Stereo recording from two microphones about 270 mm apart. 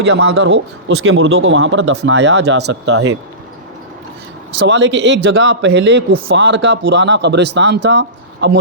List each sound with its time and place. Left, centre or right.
0.0 s a man's voice: right
4.6 s a man's voice: right